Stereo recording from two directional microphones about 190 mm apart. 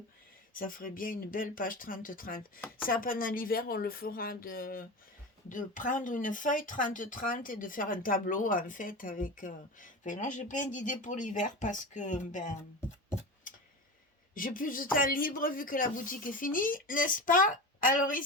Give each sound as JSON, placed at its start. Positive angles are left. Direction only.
{"t": 0.5, "sound": "speech", "side_deg": 45}
{"t": 14.3, "sound": "speech", "side_deg": 45}